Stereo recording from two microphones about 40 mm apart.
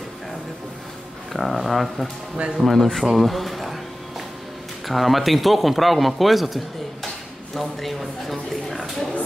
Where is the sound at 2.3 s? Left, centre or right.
Right.